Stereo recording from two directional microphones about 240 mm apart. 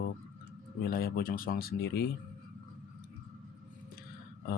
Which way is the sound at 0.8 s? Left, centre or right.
Left.